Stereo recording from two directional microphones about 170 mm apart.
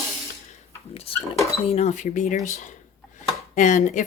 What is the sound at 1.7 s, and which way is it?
A woman's voice, 40° left (ahead or behind).